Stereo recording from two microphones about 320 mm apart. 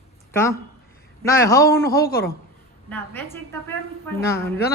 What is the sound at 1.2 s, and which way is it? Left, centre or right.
Speech, centre.